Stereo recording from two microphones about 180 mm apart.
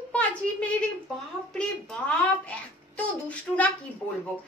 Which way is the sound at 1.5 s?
5° left (ahead or behind).